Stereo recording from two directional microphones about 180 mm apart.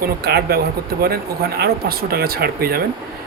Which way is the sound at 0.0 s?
60° right (ahead or behind).